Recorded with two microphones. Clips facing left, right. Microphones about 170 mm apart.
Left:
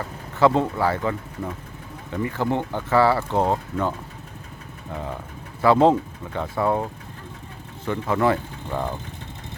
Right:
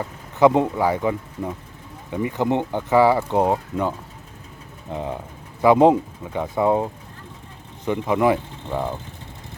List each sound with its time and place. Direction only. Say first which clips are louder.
0.0 s speech: right 3 dB; 15° right (ahead or behind)
7.9 s speech: right 2 dB; 15° right (ahead or behind)